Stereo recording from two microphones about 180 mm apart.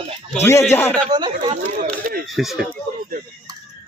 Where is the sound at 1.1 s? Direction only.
25° right (ahead or behind).